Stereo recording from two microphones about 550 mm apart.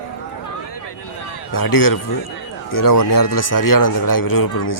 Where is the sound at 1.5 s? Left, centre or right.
Left.